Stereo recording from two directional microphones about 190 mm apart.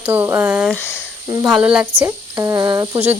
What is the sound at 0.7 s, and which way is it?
Speech, 10° left (ahead or behind).